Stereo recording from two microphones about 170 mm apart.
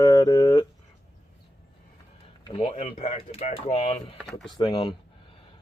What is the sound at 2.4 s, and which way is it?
Speech, 30° left (ahead or behind).